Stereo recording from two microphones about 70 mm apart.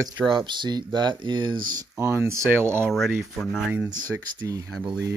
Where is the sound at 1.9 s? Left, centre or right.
Right.